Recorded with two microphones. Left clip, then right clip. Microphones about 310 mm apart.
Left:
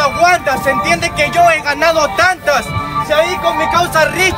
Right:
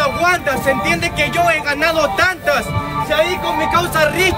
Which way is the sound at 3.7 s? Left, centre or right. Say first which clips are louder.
Left 1 dB; centre.